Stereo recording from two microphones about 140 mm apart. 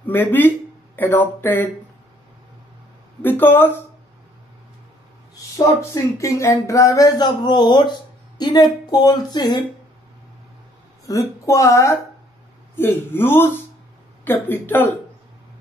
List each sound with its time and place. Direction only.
0.0 s speech: 15° left (ahead or behind)
3.2 s speech: 15° left (ahead or behind)
5.3 s a sound: 25° left (ahead or behind)
8.4 s a woman's voice: 30° left (ahead or behind)
11.1 s a sound: 25° left (ahead or behind)
12.7 s speech: 15° left (ahead or behind)